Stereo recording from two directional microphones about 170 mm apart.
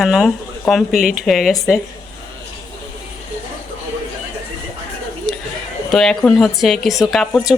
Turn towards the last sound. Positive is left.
turn(degrees=0)  # may be behind; listen again after turning